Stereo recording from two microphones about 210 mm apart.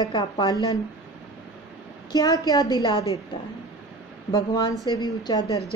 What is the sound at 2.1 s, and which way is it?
Speech, 15° left (ahead or behind).